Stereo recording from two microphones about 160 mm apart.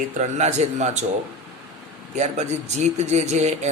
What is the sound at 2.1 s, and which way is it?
Speech, 45° right (ahead or behind).